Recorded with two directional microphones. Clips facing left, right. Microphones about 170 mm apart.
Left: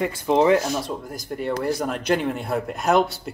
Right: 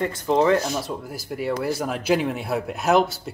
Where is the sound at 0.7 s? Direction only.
5° right (ahead or behind).